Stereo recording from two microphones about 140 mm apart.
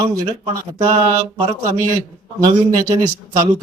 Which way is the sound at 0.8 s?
25° right (ahead or behind).